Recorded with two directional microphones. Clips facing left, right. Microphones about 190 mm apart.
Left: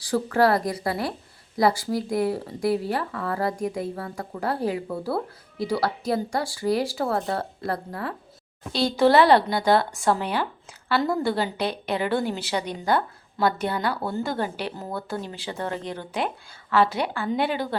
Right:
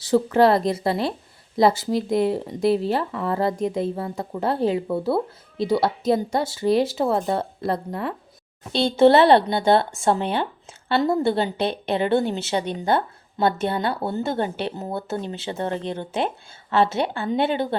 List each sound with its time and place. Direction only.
0.0 s speech: 20° right (ahead or behind)